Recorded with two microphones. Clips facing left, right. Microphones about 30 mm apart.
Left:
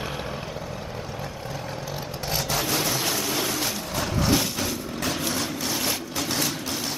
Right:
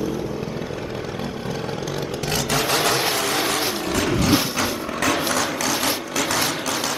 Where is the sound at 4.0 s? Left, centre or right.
Right.